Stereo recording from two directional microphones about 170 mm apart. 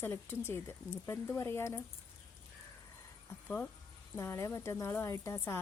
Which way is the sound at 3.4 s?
10° left (ahead or behind).